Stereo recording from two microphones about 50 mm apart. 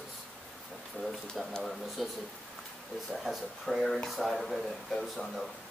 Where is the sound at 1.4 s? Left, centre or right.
Centre.